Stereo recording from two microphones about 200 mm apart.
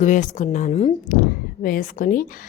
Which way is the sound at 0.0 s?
40° left (ahead or behind).